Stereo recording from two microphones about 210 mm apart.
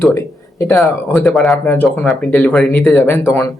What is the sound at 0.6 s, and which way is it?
Speech, 15° left (ahead or behind).